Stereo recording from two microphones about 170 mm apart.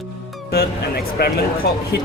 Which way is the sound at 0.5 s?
65° left (ahead or behind).